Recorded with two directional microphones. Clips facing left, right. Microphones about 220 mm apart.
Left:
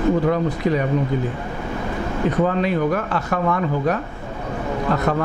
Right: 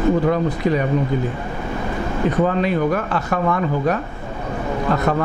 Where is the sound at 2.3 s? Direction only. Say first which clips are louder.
Right 1 dB; 20° right (ahead or behind).